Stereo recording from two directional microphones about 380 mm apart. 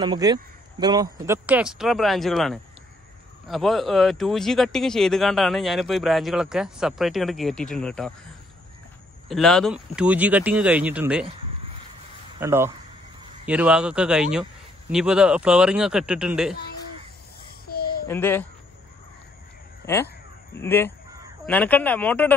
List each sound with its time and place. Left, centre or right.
0.0 s a man's voice: centre
9.3 s a man's voice: centre
12.4 s a man's voice: centre
17.6 s a sound: left
18.0 s a man's voice: centre
20.5 s a man's voice: centre